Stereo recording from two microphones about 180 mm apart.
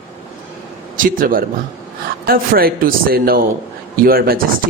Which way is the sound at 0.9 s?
50° right (ahead or behind).